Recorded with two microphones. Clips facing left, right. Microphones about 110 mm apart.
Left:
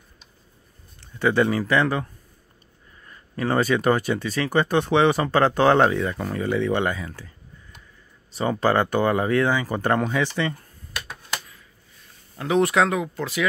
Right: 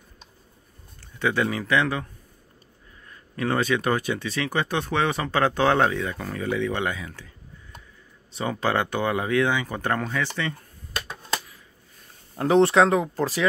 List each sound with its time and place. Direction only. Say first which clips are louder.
1.2 s speech: left 4 dB; 5° left (ahead or behind)
3.1 s speech: left 2 dB; 5° left (ahead or behind)
11.1 s a sound: right 3 dB; 30° right (ahead or behind)
12.4 s speech: right 2 dB; 35° right (ahead or behind)